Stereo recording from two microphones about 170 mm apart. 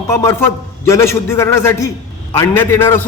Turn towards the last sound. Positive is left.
turn(degrees=15)  # may be behind; listen again after turning